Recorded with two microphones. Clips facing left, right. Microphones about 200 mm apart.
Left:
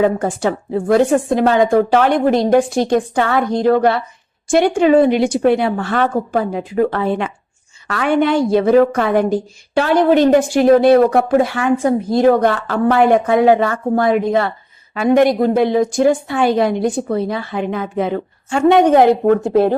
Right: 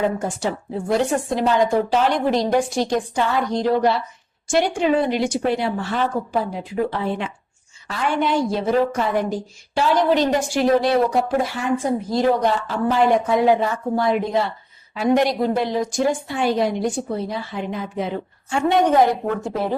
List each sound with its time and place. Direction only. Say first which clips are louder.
0.0 s a woman's voice: left 6 dB; 60° left (ahead or behind)
18.7 s a woman's voice: left 6 dB; 70° left (ahead or behind)